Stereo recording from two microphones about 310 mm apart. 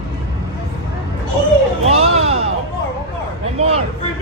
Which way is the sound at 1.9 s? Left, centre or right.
Centre.